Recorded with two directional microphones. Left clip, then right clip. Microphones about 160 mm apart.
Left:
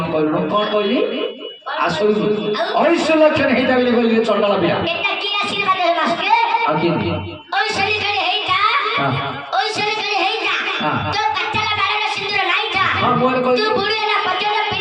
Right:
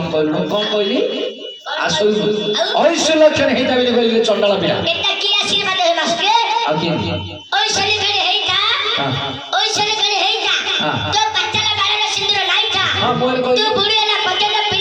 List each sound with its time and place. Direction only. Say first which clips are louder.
2.7 s a man's voice: right 1 dB; 45° right (ahead or behind)
7.5 s music: right 2 dB; 40° right (ahead or behind)
12.3 s a sound: right 1 dB; 40° right (ahead or behind)